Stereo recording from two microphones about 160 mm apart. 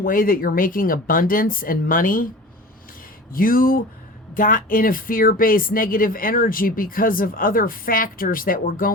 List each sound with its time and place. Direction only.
0.0 s speech: 60° left (ahead or behind)
3.3 s speech: 65° left (ahead or behind)